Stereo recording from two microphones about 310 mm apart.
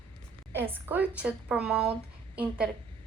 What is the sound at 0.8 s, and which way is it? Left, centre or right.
A woman's voice, centre.